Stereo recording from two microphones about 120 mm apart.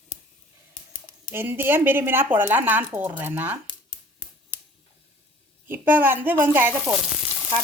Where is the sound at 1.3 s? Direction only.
20° right (ahead or behind).